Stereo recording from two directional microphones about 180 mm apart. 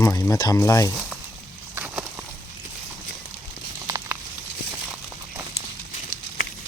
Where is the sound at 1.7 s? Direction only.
5° right (ahead or behind).